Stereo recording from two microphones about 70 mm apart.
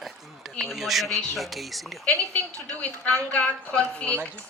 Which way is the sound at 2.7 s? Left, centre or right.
Left.